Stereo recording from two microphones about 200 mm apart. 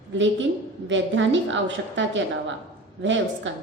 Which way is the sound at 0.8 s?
65° right (ahead or behind).